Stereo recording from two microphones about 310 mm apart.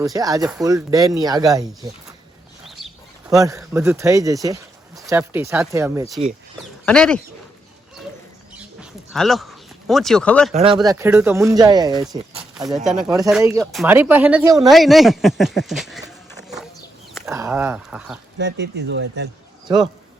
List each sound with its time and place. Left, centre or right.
0.0 s speech: centre
3.2 s speech: centre
6.8 s speech: centre
8.5 s a sound: centre
10.5 s speech: centre
10.8 s speech: centre
12.5 s speech: centre
13.1 s speech: centre
14.7 s speech: centre
18.3 s speech: right
19.7 s speech: centre